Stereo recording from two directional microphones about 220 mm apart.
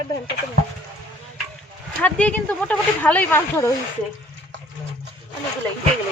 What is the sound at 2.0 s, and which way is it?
Speech, 5° left (ahead or behind).